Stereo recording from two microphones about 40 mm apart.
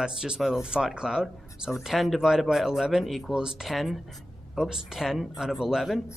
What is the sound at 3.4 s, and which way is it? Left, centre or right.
Speech, centre.